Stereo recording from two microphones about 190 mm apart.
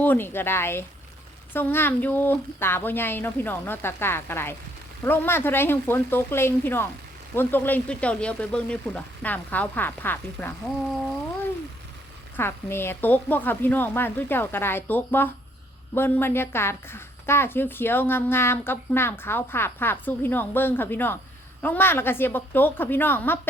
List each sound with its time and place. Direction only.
0.0 s a woman's voice: 10° left (ahead or behind)
12.4 s a woman's voice: 10° left (ahead or behind)